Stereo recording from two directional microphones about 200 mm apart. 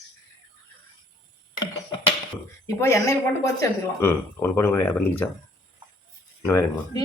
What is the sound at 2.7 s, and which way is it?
Speech, 15° left (ahead or behind).